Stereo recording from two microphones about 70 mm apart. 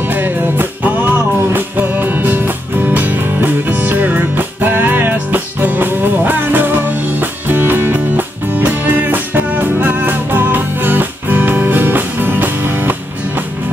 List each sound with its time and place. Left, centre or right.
0.0 s music: right